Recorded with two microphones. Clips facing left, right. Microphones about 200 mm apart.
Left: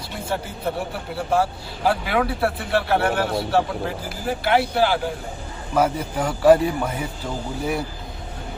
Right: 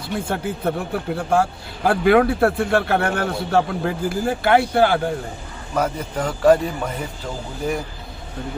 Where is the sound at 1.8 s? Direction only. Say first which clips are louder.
Right 6 dB; 50° right (ahead or behind).